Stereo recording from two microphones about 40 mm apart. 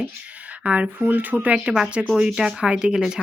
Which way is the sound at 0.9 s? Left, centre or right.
Right.